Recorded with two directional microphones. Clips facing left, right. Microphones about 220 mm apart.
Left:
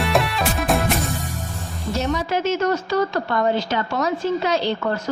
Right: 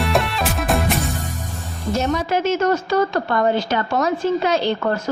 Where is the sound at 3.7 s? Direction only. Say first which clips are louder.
Right 2 dB; 50° right (ahead or behind).